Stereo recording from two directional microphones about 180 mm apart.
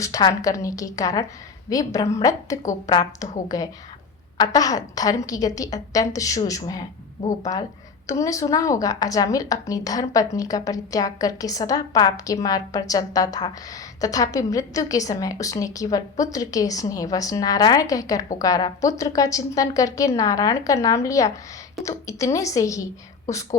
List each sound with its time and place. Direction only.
0.0 s a woman's voice: 20° left (ahead or behind)